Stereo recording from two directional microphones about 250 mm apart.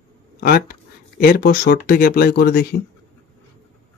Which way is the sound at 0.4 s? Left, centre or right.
Left.